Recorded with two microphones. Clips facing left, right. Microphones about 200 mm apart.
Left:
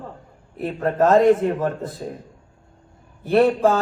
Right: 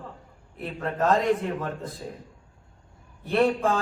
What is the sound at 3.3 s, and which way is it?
Speech, 45° left (ahead or behind).